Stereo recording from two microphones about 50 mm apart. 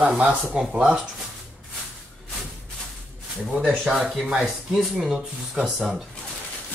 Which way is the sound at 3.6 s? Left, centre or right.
Centre.